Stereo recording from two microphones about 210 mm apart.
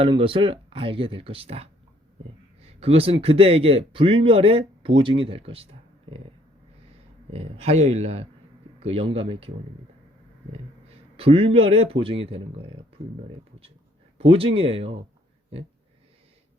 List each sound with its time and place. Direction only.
0.0 s speech: 25° right (ahead or behind)
7.3 s speech: 30° right (ahead or behind)
11.2 s speech: 25° right (ahead or behind)
14.2 s speech: 25° right (ahead or behind)